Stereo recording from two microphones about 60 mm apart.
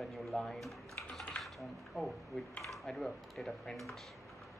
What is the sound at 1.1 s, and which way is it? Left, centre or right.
Typing, centre.